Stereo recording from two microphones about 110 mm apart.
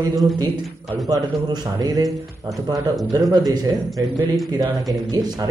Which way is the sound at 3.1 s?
35° right (ahead or behind).